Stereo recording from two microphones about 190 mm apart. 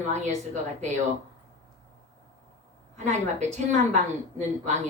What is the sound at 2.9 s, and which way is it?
A woman's voice, 40° right (ahead or behind).